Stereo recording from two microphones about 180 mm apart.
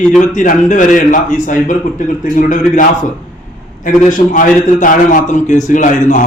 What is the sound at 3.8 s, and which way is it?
A man's voice, 45° left (ahead or behind).